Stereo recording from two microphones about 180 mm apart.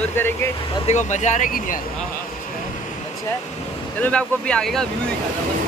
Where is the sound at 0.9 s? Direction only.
40° left (ahead or behind).